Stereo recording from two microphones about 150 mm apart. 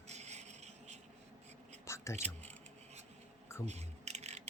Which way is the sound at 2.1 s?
50° right (ahead or behind).